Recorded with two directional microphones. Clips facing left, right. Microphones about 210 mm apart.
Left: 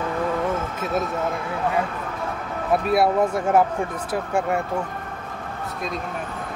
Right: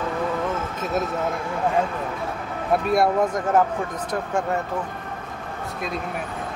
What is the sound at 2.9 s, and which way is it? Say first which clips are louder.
Speech: left 1 dB; 5° left (ahead or behind).